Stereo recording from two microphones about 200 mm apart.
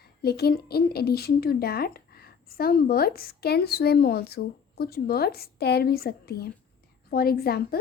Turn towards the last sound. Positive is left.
turn(degrees=50)  # may be behind; listen again after turning